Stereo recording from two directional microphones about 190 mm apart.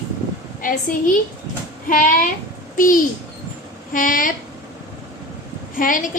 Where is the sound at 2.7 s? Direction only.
45° left (ahead or behind).